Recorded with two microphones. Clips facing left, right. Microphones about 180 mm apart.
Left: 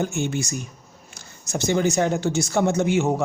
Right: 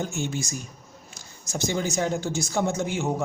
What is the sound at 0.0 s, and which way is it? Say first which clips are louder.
Speech: left 5 dB; 60° left (ahead or behind).